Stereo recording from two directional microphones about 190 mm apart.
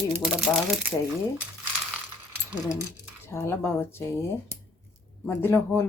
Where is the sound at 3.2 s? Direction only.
15° left (ahead or behind).